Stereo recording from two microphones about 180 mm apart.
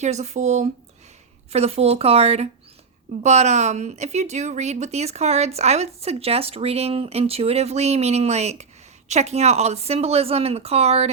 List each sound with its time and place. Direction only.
0.0 s a woman's voice: 40° right (ahead or behind)